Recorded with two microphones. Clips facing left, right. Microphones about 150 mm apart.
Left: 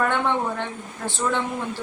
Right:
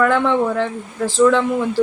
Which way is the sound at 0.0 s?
90° right.